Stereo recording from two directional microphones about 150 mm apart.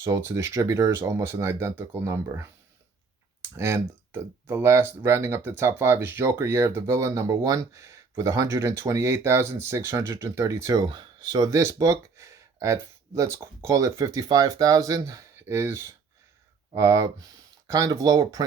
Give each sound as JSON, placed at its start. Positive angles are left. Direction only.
{"t": 0.0, "sound": "speech", "side_deg": -15}
{"t": 3.6, "sound": "speech", "side_deg": -15}